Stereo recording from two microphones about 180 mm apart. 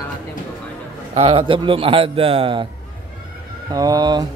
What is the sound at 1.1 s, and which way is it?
Speech, 30° right (ahead or behind).